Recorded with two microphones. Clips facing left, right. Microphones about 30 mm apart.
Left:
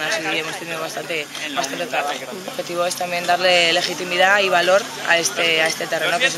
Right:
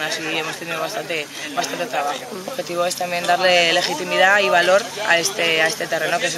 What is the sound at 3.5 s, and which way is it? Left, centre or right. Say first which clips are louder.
Speech: even; left.